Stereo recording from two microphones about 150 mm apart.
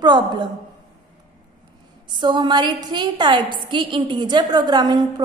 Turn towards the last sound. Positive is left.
turn(degrees=-25)  # may be behind; listen again after turning